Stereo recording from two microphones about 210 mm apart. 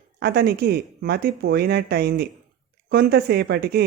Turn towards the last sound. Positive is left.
turn(degrees=-50)  # may be behind; listen again after turning